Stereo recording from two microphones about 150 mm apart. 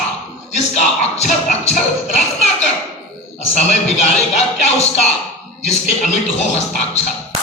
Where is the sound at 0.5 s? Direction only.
50° left (ahead or behind).